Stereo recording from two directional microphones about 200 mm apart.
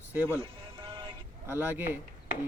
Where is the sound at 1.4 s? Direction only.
10° right (ahead or behind).